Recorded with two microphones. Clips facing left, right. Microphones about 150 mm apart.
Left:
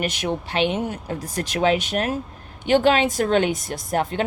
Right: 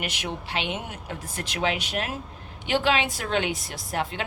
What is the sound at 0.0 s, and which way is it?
Speech, 40° left (ahead or behind).